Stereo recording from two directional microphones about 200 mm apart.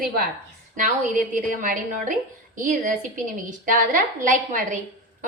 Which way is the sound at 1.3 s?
40° right (ahead or behind).